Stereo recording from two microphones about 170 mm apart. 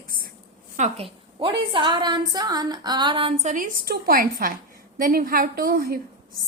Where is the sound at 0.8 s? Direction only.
45° right (ahead or behind).